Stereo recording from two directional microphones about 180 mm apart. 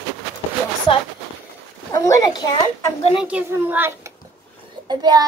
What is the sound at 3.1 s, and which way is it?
A child's voice, 5° right (ahead or behind).